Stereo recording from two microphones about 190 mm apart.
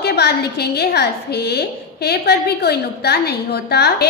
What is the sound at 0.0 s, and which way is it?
A woman's voice, 60° left (ahead or behind).